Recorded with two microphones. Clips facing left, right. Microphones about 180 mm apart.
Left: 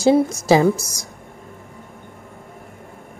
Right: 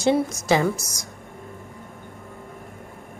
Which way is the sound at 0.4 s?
30° left (ahead or behind).